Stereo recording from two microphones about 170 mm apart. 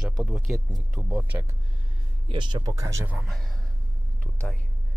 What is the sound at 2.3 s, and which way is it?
Speech, 25° right (ahead or behind).